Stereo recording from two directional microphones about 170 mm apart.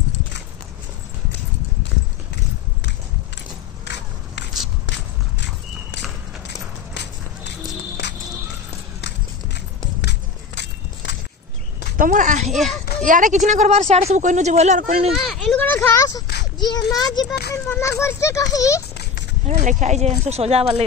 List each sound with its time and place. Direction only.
3.8 s a sound: 90° left
4.8 s walk: 90° left
10.0 s walk: 90° left
12.0 s speech: 50° right (ahead or behind)
12.4 s a child's voice: centre (ahead or behind)
13.0 s speech: 50° right (ahead or behind)
15.1 s a child's voice: 5° left (ahead or behind); by 16.3 s 20° left (ahead or behind)
16.5 s a sound: 25° left (ahead or behind)
17.0 s a child's voice: 25° left (ahead or behind)
19.4 s speech: 50° right (ahead or behind)